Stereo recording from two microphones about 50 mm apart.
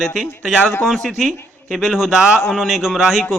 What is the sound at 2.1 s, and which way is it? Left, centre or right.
Speech, centre.